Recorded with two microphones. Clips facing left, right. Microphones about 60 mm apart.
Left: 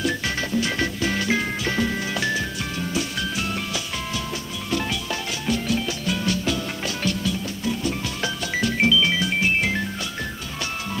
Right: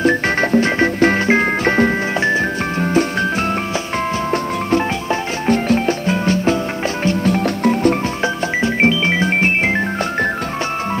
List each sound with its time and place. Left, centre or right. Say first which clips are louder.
0.0 s music: right 10 dB; right
5.5 s music: right 9 dB; right
7.2 s music: right 11 dB; right
8.5 s music: right 3 dB; right